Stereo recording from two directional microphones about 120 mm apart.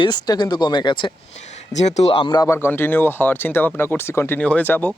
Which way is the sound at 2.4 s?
20° left (ahead or behind).